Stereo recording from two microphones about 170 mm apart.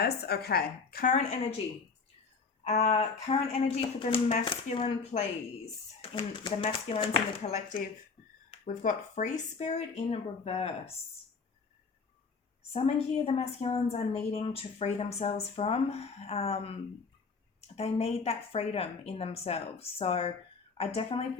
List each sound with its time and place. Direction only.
0.0 s a woman's voice: 70° left (ahead or behind)
2.8 s a woman's voice: 35° left (ahead or behind)
12.7 s a woman's voice: 35° left (ahead or behind)
17.7 s a woman's voice: 40° left (ahead or behind)